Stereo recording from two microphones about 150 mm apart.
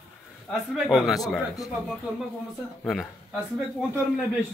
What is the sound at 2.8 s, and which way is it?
Speech, centre (ahead or behind).